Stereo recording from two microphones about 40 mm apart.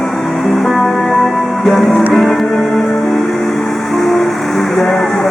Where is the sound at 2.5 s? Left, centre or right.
Centre.